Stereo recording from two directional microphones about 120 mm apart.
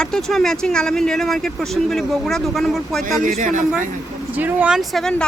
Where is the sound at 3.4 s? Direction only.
90° right.